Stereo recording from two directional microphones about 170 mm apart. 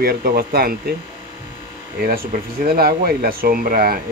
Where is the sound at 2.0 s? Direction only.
60° right (ahead or behind).